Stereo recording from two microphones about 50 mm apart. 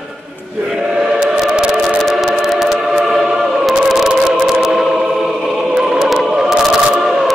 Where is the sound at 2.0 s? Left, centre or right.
Centre.